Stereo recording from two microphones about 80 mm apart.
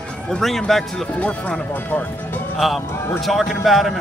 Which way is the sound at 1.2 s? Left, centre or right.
Centre.